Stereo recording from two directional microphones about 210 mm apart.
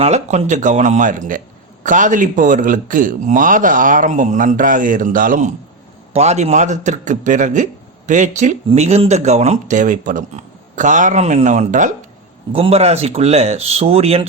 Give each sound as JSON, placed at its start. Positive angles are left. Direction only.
{"t": 0.0, "sound": "a man's voice", "side_deg": -35}